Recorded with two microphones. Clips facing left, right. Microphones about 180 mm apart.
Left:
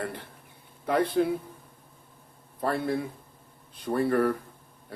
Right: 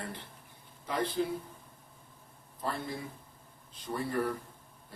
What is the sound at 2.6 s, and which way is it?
Speech, 60° left (ahead or behind).